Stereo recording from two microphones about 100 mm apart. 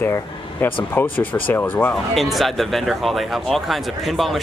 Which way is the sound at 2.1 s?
Centre (ahead or behind).